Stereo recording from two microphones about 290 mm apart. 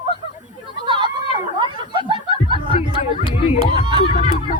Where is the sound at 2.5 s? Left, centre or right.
Centre.